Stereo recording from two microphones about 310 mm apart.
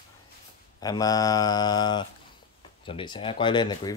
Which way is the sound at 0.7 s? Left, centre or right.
Centre.